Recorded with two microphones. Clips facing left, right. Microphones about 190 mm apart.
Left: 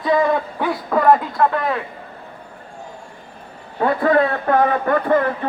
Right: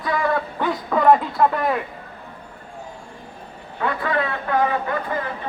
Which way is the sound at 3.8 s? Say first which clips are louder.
Left 7 dB; 40° left (ahead or behind).